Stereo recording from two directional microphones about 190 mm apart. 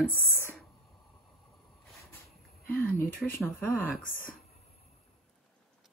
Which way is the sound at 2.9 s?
50° left (ahead or behind).